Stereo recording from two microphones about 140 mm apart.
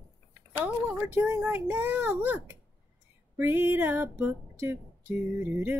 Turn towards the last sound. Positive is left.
turn(degrees=-15)  # may be behind; listen again after turning